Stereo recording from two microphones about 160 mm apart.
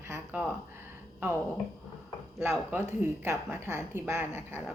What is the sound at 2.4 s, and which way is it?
Speech, 15° right (ahead or behind).